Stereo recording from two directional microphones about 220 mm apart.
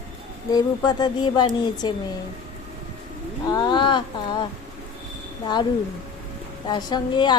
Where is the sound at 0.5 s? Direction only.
20° left (ahead or behind).